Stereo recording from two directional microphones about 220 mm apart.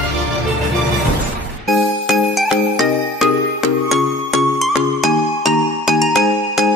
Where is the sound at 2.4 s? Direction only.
Centre (ahead or behind).